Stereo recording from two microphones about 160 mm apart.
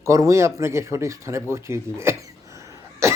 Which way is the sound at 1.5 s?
15° right (ahead or behind).